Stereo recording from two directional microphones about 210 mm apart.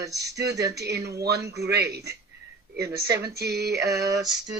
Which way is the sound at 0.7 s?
50° right (ahead or behind).